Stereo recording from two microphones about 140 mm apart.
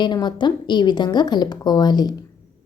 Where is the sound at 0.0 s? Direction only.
30° left (ahead or behind).